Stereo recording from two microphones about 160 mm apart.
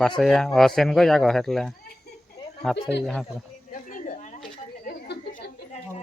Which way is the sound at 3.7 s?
55° left (ahead or behind).